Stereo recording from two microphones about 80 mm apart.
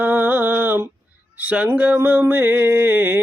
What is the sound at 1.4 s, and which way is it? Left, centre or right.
Speech, centre.